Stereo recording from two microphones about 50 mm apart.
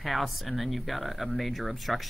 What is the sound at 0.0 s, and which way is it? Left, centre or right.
Speech, centre.